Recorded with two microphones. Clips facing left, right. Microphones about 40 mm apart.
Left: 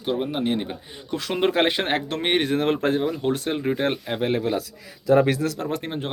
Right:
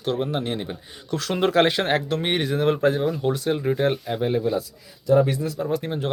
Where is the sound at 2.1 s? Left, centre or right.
Left.